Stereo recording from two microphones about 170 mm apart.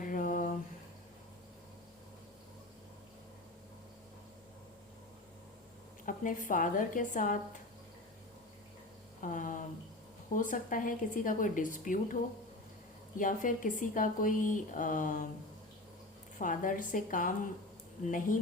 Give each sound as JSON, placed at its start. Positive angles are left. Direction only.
{"t": 0.0, "sound": "a sound", "side_deg": 50}
{"t": 6.1, "sound": "a woman's voice", "side_deg": 50}
{"t": 9.2, "sound": "a woman's voice", "side_deg": 50}
{"t": 13.1, "sound": "a woman's voice", "side_deg": 50}
{"t": 16.4, "sound": "a woman's voice", "side_deg": 50}